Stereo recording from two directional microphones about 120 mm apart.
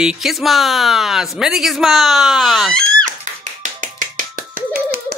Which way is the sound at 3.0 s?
90° right.